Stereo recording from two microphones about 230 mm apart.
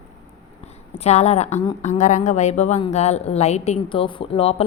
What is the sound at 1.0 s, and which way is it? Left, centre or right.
A woman's voice, left.